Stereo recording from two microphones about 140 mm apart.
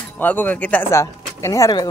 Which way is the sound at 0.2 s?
10° left (ahead or behind).